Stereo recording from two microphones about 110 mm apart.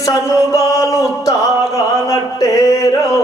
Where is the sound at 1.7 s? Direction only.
30° left (ahead or behind).